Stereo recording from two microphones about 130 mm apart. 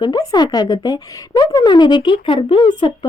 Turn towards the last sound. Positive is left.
turn(degrees=35)  # may be behind; listen again after turning